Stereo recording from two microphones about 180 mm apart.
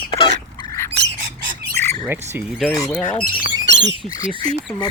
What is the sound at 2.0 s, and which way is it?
Bird, 10° right (ahead or behind).